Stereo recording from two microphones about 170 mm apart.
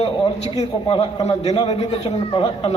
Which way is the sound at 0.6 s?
30° left (ahead or behind).